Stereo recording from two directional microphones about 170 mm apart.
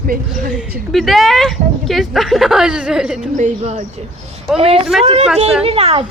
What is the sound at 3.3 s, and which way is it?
Speech, 45° right (ahead or behind).